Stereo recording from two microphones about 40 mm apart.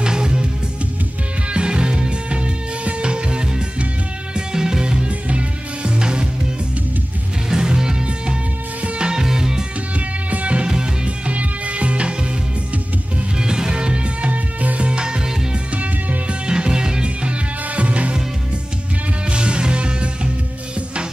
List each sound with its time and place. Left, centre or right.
0.0 s music: centre
1.5 s music: right
5.0 s music: right
7.4 s music: centre
9.1 s music: centre
9.9 s music: right
13.4 s music: centre; by 14.9 s right
14.9 s music: right
15.7 s music: right
16.4 s music: right
19.3 s music: right